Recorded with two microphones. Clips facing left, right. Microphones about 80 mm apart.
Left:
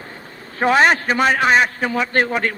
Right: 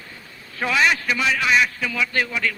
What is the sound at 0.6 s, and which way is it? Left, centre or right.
A man's voice, left.